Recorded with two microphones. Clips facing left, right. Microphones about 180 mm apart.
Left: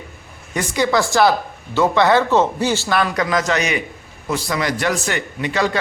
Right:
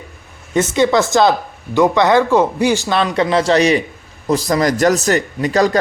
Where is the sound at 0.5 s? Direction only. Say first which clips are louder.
Right 5 dB; 25° right (ahead or behind).